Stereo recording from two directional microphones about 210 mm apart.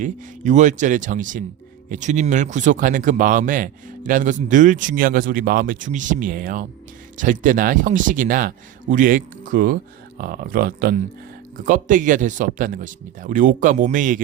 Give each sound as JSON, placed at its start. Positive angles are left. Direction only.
{"t": 0.0, "sound": "speech", "side_deg": -35}